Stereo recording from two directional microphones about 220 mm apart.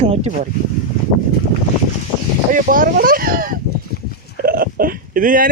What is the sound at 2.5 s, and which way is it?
Speech, 40° right (ahead or behind).